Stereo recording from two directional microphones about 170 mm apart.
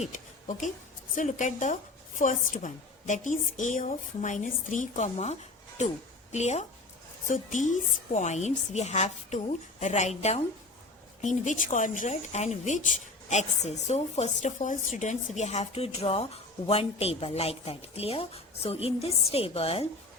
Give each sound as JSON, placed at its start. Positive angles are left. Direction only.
{"t": 0.0, "sound": "a woman's voice", "side_deg": 45}